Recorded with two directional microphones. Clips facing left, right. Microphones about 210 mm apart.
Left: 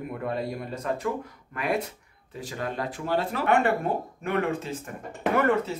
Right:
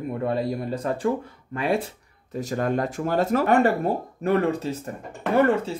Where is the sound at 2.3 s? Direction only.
45° right (ahead or behind).